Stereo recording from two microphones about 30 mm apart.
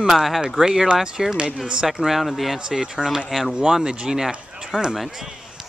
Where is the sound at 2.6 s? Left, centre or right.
Right.